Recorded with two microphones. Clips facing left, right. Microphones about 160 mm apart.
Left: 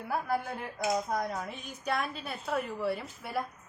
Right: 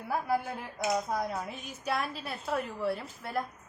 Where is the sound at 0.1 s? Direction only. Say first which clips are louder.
Right 1 dB; 5° right (ahead or behind).